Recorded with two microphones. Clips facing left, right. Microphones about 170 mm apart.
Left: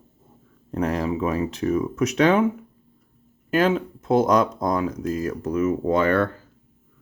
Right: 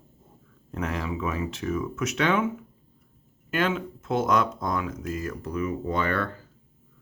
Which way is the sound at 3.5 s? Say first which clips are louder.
Left 6 dB; 40° left (ahead or behind).